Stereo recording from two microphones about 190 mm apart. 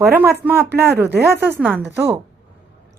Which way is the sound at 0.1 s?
15° right (ahead or behind).